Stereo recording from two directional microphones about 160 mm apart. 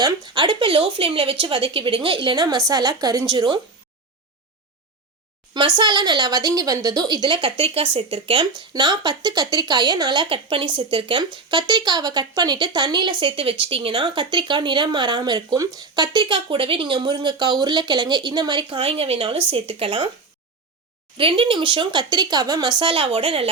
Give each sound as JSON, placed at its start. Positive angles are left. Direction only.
{"t": 0.0, "sound": "speech", "side_deg": -25}
{"t": 5.5, "sound": "speech", "side_deg": -25}
{"t": 21.2, "sound": "speech", "side_deg": -35}